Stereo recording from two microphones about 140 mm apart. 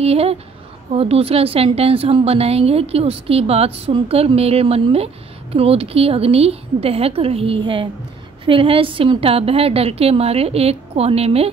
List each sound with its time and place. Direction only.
0.0 s a woman's voice: 45° right (ahead or behind)